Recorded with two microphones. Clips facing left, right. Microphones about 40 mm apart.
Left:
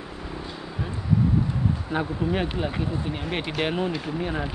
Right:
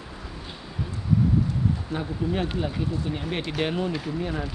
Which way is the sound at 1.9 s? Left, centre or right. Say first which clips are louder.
Left 2 dB; centre.